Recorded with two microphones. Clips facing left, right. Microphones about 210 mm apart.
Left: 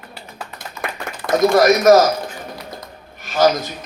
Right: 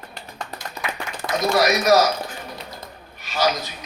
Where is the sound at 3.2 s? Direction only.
50° left (ahead or behind).